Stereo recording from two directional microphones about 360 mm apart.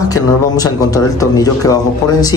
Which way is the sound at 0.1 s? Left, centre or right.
Centre.